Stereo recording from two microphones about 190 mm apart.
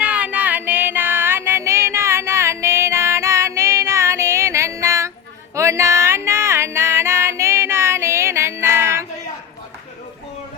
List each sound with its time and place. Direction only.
0.0 s music: 5° right (ahead or behind)